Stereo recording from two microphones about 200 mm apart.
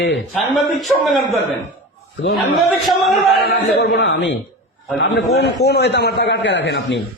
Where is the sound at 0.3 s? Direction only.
Centre (ahead or behind).